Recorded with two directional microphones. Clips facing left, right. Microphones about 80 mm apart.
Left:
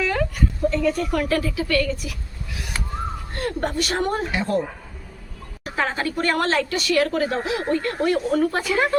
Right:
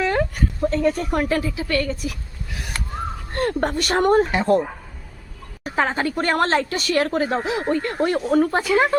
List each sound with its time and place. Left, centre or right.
0.0 s a sound: right
0.7 s a woman's voice: right
5.6 s a woman's voice: right
8.6 s speech: centre